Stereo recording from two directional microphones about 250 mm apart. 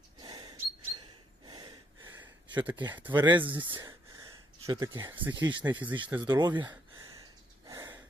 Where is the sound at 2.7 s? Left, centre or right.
Centre.